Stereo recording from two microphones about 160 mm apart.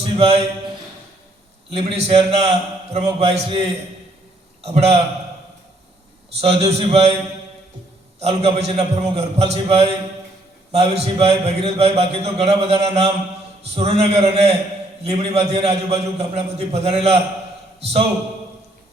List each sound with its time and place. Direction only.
0.0 s speech: 35° right (ahead or behind)
1.7 s a man's voice: 40° right (ahead or behind)
6.4 s a man's voice: 40° right (ahead or behind)
8.2 s a man's voice: 40° right (ahead or behind)